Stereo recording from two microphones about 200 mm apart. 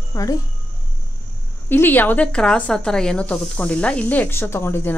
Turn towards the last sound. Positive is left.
turn(degrees=10)  # may be behind; listen again after turning